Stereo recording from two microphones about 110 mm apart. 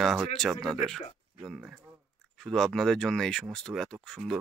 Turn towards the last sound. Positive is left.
turn(degrees=5)  # may be behind; listen again after turning